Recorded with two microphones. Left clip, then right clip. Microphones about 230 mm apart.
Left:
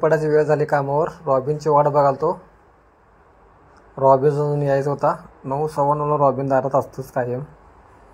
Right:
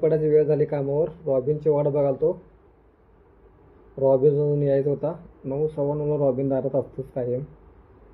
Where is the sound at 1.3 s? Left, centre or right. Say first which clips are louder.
Left 5 dB; centre.